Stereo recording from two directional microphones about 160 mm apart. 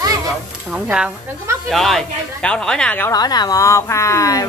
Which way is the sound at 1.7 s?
Centre (ahead or behind).